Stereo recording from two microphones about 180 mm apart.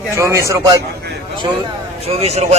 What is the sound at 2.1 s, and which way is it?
Speech, 35° right (ahead or behind).